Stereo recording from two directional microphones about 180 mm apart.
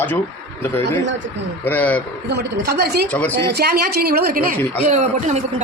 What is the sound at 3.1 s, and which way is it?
Speech, 10° left (ahead or behind).